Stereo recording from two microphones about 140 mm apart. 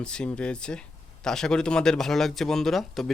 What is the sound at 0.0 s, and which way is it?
Speech, 5° left (ahead or behind).